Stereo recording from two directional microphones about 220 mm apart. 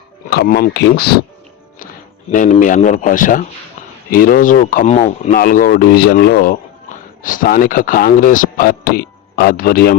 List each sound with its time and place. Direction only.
0.3 s speech: 45° left (ahead or behind)
2.3 s speech: 35° left (ahead or behind)